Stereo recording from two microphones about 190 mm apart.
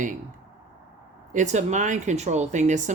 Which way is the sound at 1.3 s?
40° right (ahead or behind).